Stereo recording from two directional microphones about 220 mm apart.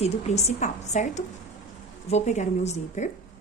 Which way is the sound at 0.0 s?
30° left (ahead or behind).